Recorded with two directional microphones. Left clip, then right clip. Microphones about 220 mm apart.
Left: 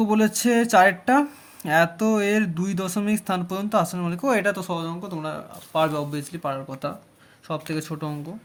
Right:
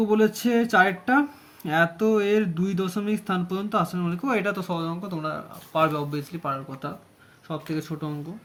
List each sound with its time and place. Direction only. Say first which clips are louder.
0.0 s speech: even; 40° left (ahead or behind)